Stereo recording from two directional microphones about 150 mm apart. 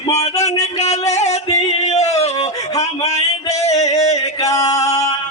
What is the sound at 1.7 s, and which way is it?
Music, 45° left (ahead or behind).